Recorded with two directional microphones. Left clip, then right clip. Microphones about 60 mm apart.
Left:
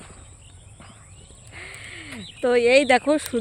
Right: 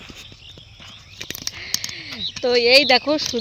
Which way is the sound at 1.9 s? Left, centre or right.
Left.